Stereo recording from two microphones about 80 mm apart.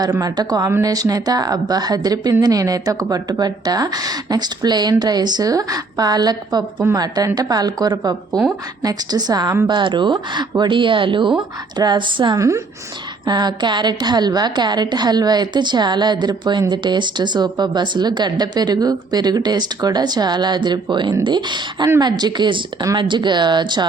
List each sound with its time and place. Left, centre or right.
0.1 s a woman's voice: right
6.9 s a woman's voice: right
9.6 s speech: right
10.6 s a woman's voice: right
12.4 s a woman's voice: right
13.2 s a woman's voice: right